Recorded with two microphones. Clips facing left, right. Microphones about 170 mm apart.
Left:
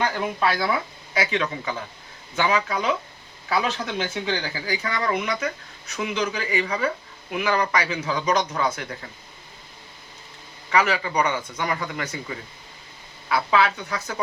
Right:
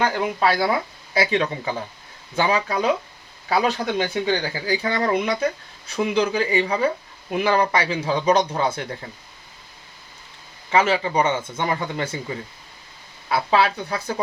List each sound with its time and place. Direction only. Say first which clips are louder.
0.0 s speech: right 3 dB; 40° right (ahead or behind)
10.7 s speech: right 3 dB; 25° right (ahead or behind)
13.2 s speech: right 2 dB; 30° right (ahead or behind)